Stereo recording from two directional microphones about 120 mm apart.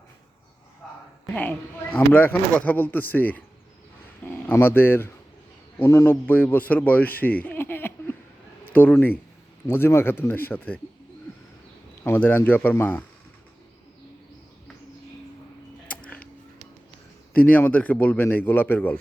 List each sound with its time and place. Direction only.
1.3 s a man's voice: 15° left (ahead or behind)
12.0 s speech: 15° left (ahead or behind)
17.3 s speech: 15° left (ahead or behind)